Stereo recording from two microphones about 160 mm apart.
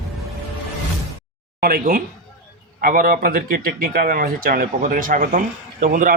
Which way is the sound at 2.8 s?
60° right (ahead or behind).